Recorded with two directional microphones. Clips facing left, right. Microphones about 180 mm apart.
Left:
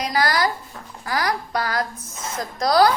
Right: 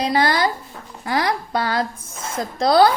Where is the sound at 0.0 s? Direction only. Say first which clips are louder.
Right 3 dB; 25° right (ahead or behind).